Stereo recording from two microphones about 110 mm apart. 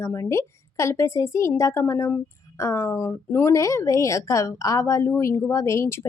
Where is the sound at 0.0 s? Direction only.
25° left (ahead or behind).